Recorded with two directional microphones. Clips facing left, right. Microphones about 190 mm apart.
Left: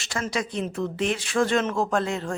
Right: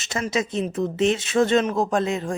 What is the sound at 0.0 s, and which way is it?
Speech, 20° right (ahead or behind).